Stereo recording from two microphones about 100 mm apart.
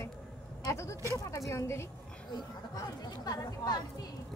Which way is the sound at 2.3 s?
40° left (ahead or behind).